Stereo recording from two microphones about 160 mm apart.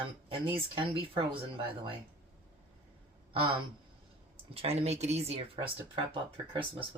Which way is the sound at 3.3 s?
30° right (ahead or behind).